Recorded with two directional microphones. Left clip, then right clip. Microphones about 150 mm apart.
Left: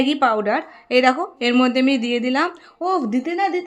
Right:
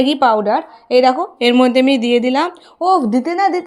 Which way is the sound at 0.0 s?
25° right (ahead or behind).